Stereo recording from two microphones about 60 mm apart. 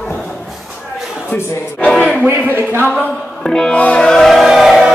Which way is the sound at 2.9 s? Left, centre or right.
Centre.